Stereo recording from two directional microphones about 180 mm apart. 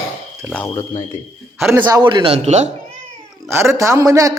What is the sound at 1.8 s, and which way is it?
Speech, 25° right (ahead or behind).